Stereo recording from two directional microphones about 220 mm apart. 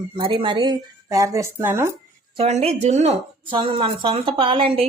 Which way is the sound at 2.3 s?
30° right (ahead or behind).